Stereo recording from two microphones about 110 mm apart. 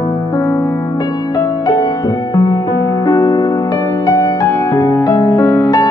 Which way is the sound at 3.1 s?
35° left (ahead or behind).